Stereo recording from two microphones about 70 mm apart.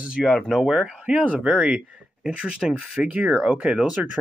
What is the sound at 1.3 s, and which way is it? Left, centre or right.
Speech, centre.